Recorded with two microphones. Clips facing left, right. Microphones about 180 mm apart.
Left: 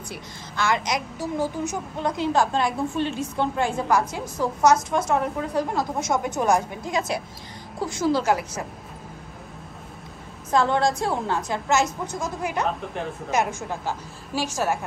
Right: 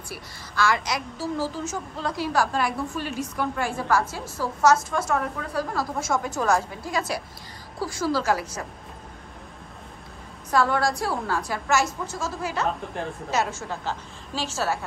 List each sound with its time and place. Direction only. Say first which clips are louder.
0.1 s a woman's voice: right 3 dB; 20° left (ahead or behind)
10.5 s a woman's voice: left 2 dB; 20° left (ahead or behind)